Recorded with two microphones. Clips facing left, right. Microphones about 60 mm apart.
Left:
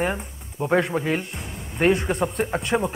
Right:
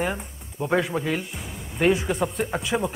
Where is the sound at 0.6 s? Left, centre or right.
Left.